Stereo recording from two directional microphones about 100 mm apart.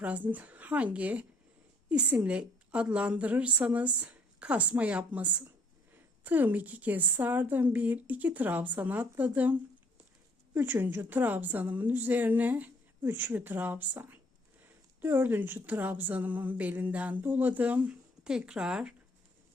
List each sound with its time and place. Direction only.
0.0 s a woman's voice: 15° right (ahead or behind)